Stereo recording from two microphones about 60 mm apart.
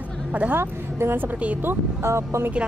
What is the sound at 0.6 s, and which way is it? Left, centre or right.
A woman's voice, right.